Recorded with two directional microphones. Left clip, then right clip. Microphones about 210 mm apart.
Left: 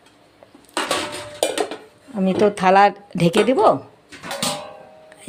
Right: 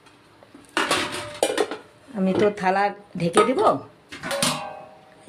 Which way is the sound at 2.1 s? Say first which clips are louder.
Left 3 dB; 25° left (ahead or behind).